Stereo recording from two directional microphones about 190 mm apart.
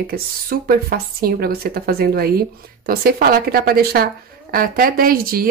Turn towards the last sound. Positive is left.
turn(degrees=-50)  # may be behind; listen again after turning